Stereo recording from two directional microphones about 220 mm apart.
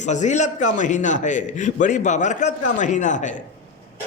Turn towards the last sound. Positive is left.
turn(degrees=35)  # may be behind; listen again after turning